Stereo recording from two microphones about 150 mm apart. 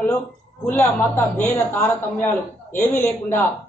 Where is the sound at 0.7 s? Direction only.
15° left (ahead or behind).